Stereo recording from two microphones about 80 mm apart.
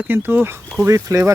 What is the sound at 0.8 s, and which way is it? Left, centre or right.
Speech, right.